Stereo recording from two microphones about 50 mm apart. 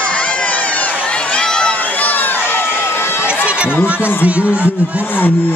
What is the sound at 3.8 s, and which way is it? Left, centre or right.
Speech, right.